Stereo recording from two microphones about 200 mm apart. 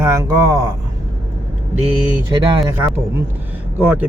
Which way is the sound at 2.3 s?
20° right (ahead or behind).